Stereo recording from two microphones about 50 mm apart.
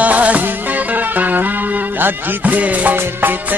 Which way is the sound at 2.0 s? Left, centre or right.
Right.